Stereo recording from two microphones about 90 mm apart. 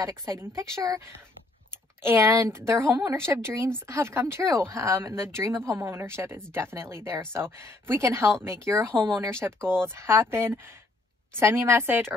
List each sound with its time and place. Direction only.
0.2 s speech: 35° right (ahead or behind)
2.0 s speech: 35° right (ahead or behind)